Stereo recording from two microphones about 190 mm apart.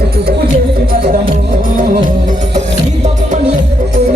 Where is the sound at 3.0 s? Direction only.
35° right (ahead or behind).